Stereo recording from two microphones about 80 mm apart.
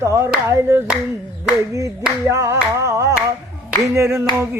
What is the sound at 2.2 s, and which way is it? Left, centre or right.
Singing, right.